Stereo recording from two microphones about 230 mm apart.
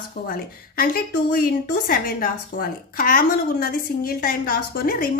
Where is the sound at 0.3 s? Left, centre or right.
Left.